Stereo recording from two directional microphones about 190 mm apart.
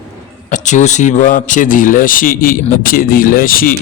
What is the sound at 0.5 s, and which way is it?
Speech, 40° left (ahead or behind).